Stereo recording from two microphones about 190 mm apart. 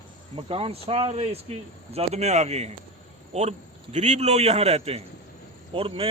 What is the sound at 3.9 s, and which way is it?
Speech, 35° right (ahead or behind).